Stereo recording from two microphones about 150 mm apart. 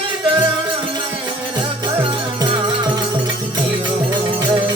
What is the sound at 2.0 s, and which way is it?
Music, 30° right (ahead or behind).